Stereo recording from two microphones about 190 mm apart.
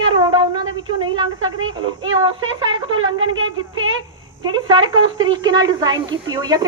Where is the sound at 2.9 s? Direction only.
90° right.